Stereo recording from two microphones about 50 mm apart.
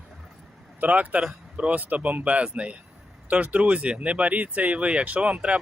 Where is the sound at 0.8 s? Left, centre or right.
Right.